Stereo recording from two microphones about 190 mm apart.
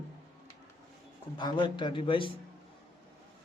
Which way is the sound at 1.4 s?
25° left (ahead or behind).